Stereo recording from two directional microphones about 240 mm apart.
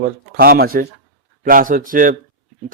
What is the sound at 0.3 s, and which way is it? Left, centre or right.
A man's voice, right.